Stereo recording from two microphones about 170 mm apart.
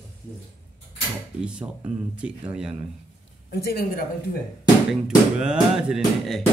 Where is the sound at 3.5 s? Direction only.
65° left (ahead or behind).